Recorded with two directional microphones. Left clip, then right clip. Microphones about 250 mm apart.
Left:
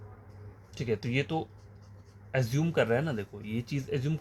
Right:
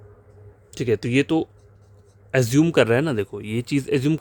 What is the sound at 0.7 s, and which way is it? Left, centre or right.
Speech, right.